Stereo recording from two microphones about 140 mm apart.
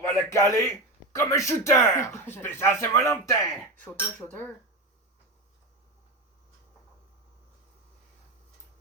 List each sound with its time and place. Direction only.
0.2 s speech: 20° left (ahead or behind)
3.8 s cutlery: 10° left (ahead or behind)